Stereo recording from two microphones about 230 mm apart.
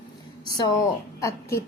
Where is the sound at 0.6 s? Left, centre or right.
Centre.